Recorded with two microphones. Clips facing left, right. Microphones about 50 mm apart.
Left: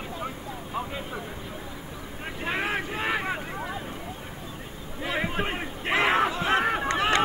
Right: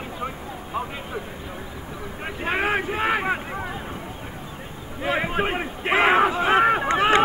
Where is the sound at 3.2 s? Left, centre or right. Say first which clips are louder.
Right 5 dB; centre.